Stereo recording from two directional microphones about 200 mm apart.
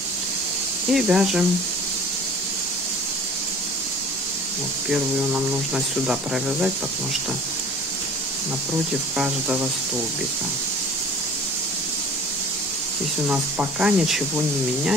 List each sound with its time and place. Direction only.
0.9 s speech: centre (ahead or behind)
6.0 s speech: 5° right (ahead or behind)
9.1 s speech: 5° right (ahead or behind)
13.3 s speech: 5° right (ahead or behind)